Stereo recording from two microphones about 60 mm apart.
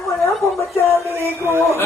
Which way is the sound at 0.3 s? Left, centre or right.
Centre.